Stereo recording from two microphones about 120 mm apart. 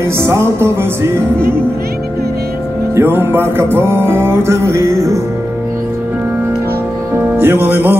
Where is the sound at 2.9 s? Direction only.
20° right (ahead or behind).